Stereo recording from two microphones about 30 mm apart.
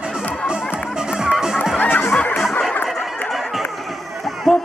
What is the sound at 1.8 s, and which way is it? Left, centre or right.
Music, left.